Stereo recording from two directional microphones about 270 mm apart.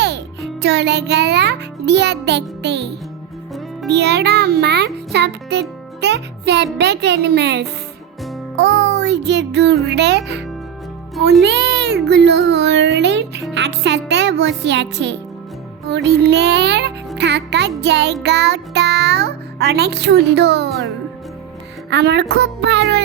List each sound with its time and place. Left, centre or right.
0.6 s a child's voice: right
8.5 s music: right
9.8 s speech: right
11.4 s speech: right
21.8 s speech: right